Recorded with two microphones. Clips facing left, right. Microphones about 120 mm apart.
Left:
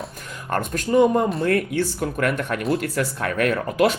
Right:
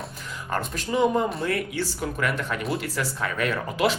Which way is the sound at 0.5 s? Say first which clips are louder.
Left 7 dB; 50° left (ahead or behind).